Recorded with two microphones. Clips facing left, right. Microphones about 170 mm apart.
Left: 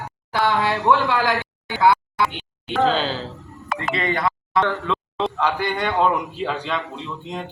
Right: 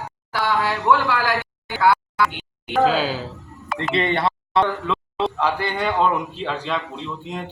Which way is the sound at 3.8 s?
30° right (ahead or behind).